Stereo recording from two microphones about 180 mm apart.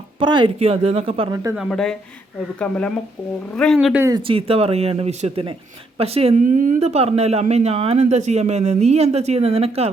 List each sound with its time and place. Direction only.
0.2 s speech: 25° right (ahead or behind)
1.5 s speech: centre (ahead or behind)
4.1 s speech: 30° right (ahead or behind)